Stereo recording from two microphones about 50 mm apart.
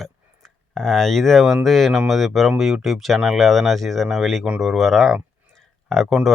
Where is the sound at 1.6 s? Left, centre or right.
Centre.